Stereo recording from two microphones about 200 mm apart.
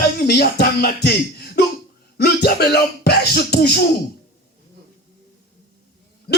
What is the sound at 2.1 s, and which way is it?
Music, 55° left (ahead or behind).